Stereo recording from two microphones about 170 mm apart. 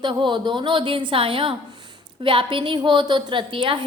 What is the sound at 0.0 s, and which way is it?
A woman's voice, 30° right (ahead or behind).